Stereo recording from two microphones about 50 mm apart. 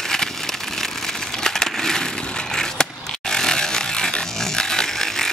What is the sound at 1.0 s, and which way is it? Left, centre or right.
Crushing, centre.